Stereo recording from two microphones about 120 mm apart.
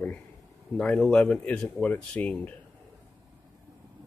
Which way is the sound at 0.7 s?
5° left (ahead or behind).